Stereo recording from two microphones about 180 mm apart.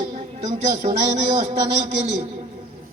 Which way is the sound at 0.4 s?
40° right (ahead or behind).